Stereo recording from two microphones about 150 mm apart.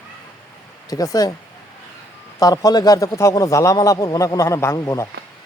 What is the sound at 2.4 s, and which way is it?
A man's voice, 25° left (ahead or behind).